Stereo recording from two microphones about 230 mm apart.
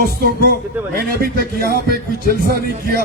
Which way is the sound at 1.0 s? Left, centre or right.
Right.